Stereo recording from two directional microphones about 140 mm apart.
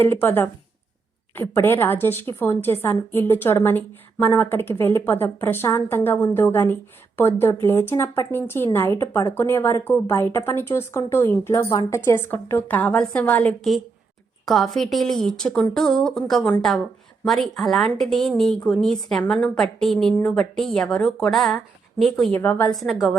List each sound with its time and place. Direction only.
0.0 s a woman's voice: 15° left (ahead or behind)
14.4 s a woman's voice: centre (ahead or behind)
22.4 s a woman's voice: 15° left (ahead or behind)
22.7 s a woman's voice: centre (ahead or behind)